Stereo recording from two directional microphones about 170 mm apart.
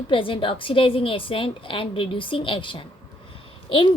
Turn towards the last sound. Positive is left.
turn(degrees=30)  # may be behind; listen again after turning